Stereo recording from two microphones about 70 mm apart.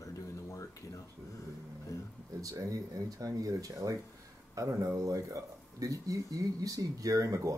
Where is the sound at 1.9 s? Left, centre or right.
Left.